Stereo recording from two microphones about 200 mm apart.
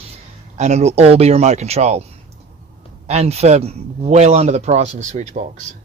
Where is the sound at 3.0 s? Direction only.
30° right (ahead or behind).